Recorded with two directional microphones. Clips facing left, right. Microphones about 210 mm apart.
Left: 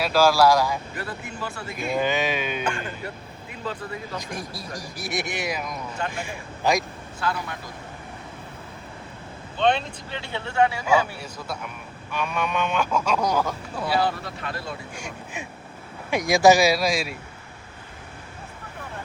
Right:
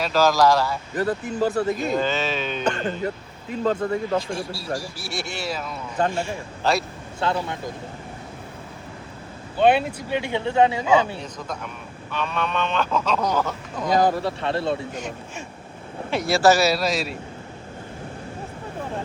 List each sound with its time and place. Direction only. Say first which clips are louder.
0.0 s speech: even; 10° left (ahead or behind)
0.9 s speech: right 10 dB; 40° right (ahead or behind)
2.0 s speech: even; 15° left (ahead or behind)
3.6 s speech: right 10 dB; 45° right (ahead or behind)
4.2 s speech: right 5 dB; 15° left (ahead or behind)
7.2 s speech: right 4 dB; 25° right (ahead or behind)
9.6 s speech: right 5 dB; 10° right (ahead or behind)
11.2 s speech: right 2 dB; 10° left (ahead or behind)
14.0 s speech: right 5 dB; 40° right (ahead or behind)
14.4 s speech: right 9 dB; 25° right (ahead or behind)
14.9 s speech: right 3 dB; 10° left (ahead or behind)